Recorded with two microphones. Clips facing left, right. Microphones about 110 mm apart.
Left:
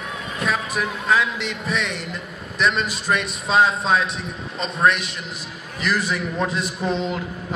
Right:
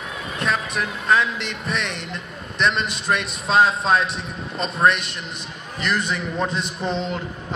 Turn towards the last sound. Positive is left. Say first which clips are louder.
# left 2 dB
turn(degrees=5)  # may be behind; listen again after turning